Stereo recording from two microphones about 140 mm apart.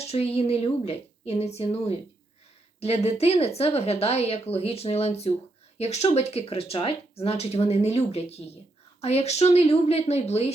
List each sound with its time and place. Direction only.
0.0 s speech: 45° left (ahead or behind)